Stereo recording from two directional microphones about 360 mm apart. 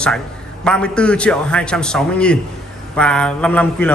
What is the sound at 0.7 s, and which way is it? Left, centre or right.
A man's voice, centre.